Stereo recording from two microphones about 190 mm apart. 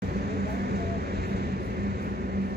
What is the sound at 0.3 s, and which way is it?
Vehicle, 55° right (ahead or behind).